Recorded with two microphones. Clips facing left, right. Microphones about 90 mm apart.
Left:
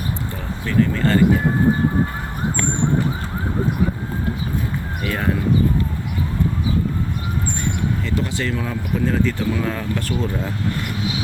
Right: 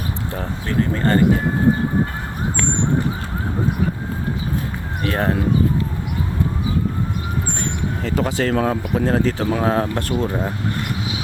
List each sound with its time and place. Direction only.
5.0 s speech: 40° right (ahead or behind)
8.0 s speech: 50° right (ahead or behind)